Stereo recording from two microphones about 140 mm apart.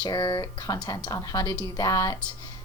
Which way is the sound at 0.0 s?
30° left (ahead or behind).